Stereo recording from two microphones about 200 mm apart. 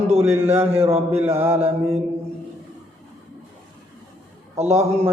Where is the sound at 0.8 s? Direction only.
30° right (ahead or behind).